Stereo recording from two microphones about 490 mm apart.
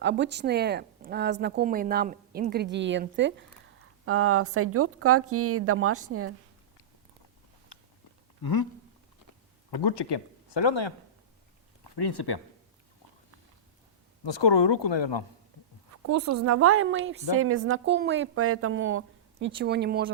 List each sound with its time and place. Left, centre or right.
0.0 s a woman's voice: right
7.7 s a sound: left
9.7 s speech: left
11.8 s speech: left
14.3 s speech: left
15.5 s a sound: right
16.0 s a woman's voice: right